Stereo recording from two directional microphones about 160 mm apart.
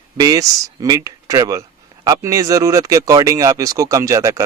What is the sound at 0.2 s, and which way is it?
Speech, 20° right (ahead or behind).